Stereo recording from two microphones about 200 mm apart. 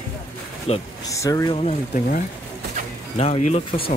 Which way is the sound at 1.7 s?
40° left (ahead or behind).